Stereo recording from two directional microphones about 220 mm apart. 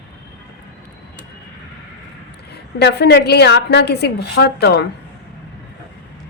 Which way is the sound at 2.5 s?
50° left (ahead or behind).